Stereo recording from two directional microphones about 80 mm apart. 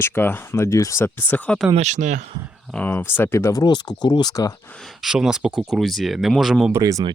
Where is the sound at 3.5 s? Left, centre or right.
Left.